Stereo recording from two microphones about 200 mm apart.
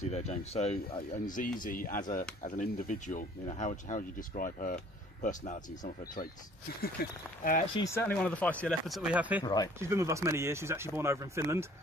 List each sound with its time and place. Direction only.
0.0 s speech: 30° left (ahead or behind)
7.7 s speech: 15° left (ahead or behind); by 9.4 s 5° right (ahead or behind)
9.4 s speech: 20° left (ahead or behind)
9.8 s speech: 15° right (ahead or behind)